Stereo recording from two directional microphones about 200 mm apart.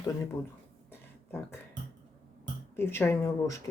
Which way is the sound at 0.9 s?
10° left (ahead or behind).